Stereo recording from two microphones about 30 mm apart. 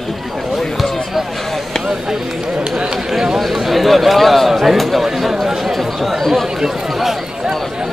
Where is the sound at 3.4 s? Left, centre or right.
Centre.